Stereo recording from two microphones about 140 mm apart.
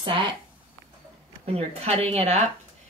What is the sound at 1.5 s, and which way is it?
Speech, 45° right (ahead or behind).